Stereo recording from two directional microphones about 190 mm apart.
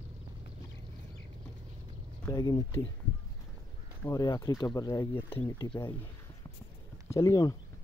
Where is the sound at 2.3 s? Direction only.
20° left (ahead or behind).